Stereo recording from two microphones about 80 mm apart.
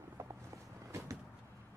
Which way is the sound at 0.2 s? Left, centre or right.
Right.